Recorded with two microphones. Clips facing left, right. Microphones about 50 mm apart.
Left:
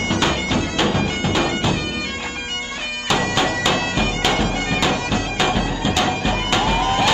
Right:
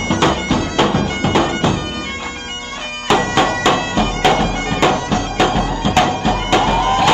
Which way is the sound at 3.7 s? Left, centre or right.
Right.